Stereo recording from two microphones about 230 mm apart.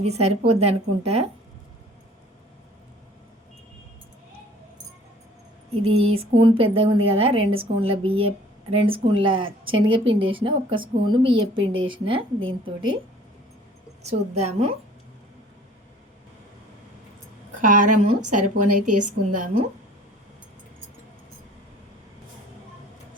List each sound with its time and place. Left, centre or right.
0.0 s a woman's voice: right
5.8 s a woman's voice: right
14.0 s a woman's voice: right
17.6 s a woman's voice: right
18.4 s a woman's voice: right
18.9 s a woman's voice: right